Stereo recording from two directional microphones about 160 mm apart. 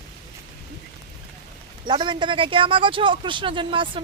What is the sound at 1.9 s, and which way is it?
Speech, 30° right (ahead or behind).